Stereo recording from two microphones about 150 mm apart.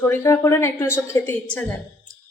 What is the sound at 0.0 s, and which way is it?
A woman's voice, 15° left (ahead or behind).